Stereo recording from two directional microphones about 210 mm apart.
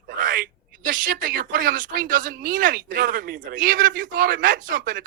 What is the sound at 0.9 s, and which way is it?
A woman's voice, 40° right (ahead or behind).